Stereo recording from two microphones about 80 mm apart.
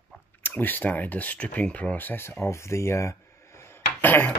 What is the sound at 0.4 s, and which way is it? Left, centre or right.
Speech, left.